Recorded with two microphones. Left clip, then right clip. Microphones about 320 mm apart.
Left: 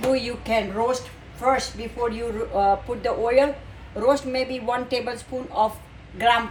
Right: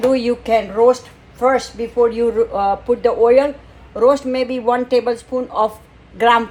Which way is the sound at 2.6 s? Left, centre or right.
Right.